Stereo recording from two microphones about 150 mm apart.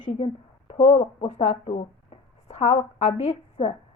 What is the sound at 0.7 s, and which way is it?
Speech, 40° left (ahead or behind).